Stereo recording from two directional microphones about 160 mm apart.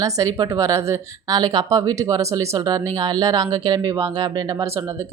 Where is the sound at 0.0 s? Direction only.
20° right (ahead or behind).